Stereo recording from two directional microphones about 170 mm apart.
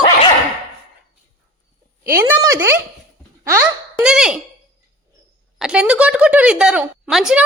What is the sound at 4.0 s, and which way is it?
Speech, 5° right (ahead or behind).